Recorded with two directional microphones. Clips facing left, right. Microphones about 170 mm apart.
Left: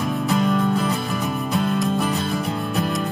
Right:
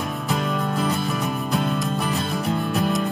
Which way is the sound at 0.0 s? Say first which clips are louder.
Left 5 dB; centre (ahead or behind).